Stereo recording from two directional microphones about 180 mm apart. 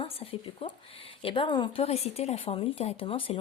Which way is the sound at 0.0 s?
30° left (ahead or behind).